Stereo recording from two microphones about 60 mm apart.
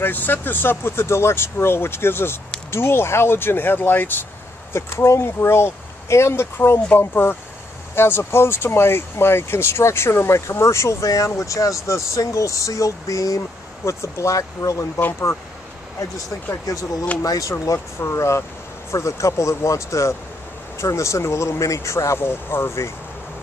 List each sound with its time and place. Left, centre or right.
0.0 s speech: left
4.7 s speech: left
13.8 s speech: left
16.7 s speech: left
18.1 s speech: left
22.2 s speech: left